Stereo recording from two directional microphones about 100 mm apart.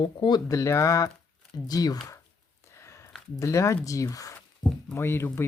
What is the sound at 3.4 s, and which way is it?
Speech, 30° left (ahead or behind).